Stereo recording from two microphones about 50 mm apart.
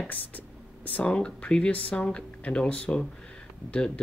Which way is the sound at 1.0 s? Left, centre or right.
Left.